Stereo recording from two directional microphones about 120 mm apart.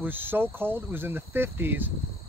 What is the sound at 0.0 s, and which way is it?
Speech, 15° right (ahead or behind).